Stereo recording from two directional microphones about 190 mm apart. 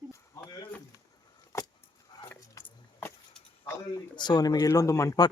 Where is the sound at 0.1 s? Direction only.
20° left (ahead or behind).